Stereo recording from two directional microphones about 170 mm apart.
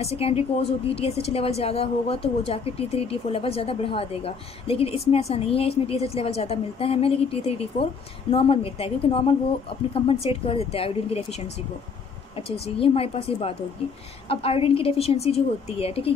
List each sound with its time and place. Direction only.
0.0 s a woman's voice: 35° left (ahead or behind)
12.4 s a woman's voice: 35° left (ahead or behind)